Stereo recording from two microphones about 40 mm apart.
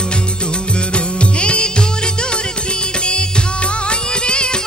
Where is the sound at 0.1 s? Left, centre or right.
Left.